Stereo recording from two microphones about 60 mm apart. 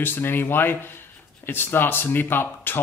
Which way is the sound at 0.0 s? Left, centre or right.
Left.